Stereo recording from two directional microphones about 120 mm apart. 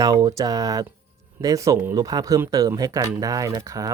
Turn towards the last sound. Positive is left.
turn(degrees=-25)  # may be behind; listen again after turning